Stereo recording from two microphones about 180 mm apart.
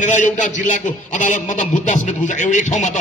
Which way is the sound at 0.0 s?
45° left (ahead or behind).